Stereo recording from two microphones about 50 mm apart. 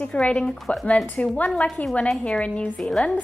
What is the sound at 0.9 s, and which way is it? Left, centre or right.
A woman's voice, centre.